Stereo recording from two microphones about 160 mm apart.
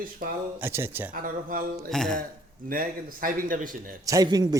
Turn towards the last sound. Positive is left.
turn(degrees=-25)  # may be behind; listen again after turning